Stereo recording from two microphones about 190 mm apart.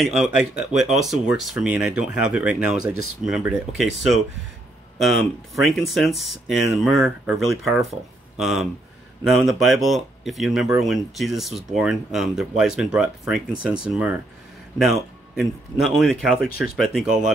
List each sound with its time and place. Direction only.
0.0 s speech: centre (ahead or behind)
2.8 s speech: 55° left (ahead or behind)
3.3 s speech: centre (ahead or behind)
5.6 s speech: centre (ahead or behind)